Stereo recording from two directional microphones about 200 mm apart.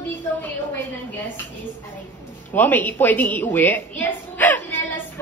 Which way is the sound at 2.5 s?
10° left (ahead or behind).